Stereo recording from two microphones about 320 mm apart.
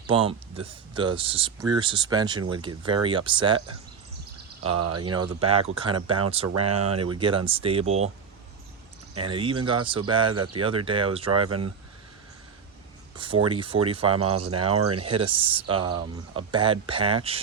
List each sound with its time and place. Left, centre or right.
0.1 s speech: centre
4.6 s speech: right
5.1 s speech: centre
9.1 s speech: centre
13.1 s speech: centre
14.7 s speech: right
15.2 s speech: centre